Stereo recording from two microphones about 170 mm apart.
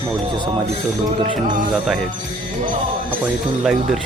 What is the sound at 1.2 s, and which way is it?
Music, 45° right (ahead or behind).